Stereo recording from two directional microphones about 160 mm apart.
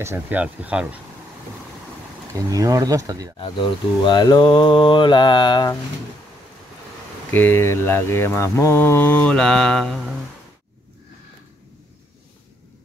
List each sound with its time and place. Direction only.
0.0 s speech: 15° right (ahead or behind)
2.3 s speech: 20° right (ahead or behind)
4.0 s mantra: 30° left (ahead or behind)
7.2 s mantra: 15° left (ahead or behind)